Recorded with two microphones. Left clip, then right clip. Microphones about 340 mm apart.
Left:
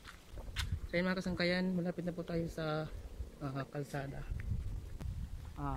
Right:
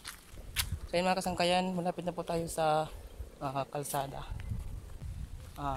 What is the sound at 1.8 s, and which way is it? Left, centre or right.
Speech, right.